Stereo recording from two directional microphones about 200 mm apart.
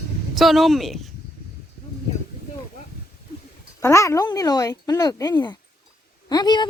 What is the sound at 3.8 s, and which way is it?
A woman's voice, 15° left (ahead or behind).